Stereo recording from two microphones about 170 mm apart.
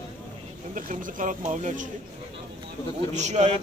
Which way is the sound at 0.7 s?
50° right (ahead or behind).